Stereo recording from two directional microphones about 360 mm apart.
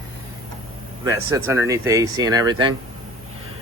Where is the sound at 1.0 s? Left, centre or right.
Centre.